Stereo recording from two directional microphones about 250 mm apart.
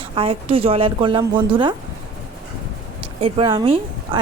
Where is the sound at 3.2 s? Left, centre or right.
Centre.